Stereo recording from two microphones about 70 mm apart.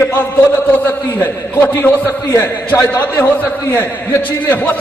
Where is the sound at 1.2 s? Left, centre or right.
Left.